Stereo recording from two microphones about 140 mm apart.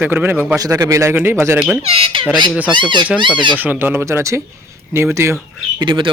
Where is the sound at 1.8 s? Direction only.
45° right (ahead or behind).